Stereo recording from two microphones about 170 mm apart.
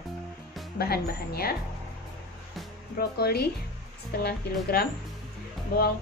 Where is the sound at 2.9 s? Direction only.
65° left (ahead or behind).